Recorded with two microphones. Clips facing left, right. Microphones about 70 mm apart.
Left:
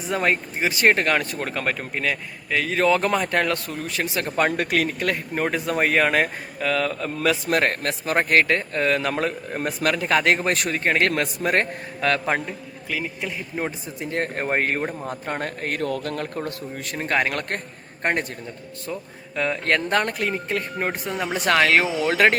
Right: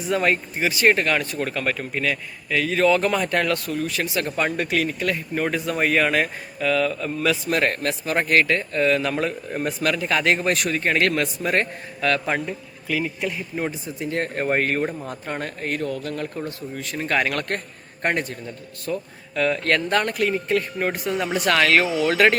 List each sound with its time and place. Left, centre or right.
0.1 s speech: left
0.7 s speech: left
12.5 s speech: centre
14.0 s speech: left
17.0 s speech: left
18.9 s speech: centre